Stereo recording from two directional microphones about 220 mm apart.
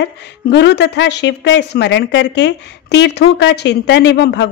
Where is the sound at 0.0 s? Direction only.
50° left (ahead or behind).